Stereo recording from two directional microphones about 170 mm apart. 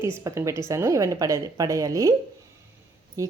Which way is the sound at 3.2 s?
20° right (ahead or behind).